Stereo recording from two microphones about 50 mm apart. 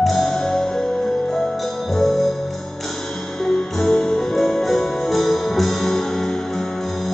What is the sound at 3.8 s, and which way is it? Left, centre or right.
Music, centre.